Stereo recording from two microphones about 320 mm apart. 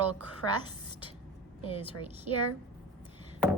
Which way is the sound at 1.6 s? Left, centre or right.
Centre.